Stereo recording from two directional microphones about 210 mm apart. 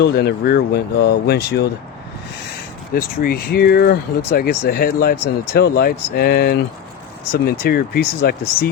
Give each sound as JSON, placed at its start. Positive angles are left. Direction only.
{"t": 0.0, "sound": "speech", "side_deg": 50}
{"t": 2.9, "sound": "speech", "side_deg": 45}